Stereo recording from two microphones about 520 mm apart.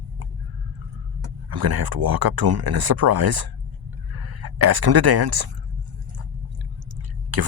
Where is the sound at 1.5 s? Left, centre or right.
Right.